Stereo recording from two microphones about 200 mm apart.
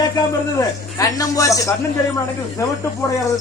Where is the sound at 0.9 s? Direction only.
15° left (ahead or behind).